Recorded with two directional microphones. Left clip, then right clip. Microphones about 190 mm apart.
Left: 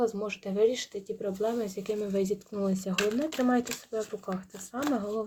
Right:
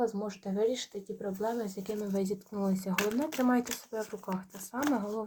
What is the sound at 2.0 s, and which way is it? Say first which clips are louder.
Speech: left 3 dB; 20° left (ahead or behind).